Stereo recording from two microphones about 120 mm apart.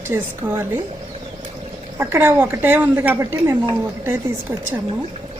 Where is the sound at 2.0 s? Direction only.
15° right (ahead or behind).